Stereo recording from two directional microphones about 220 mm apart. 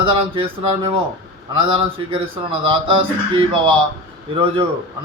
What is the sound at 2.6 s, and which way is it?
Speech, 20° right (ahead or behind).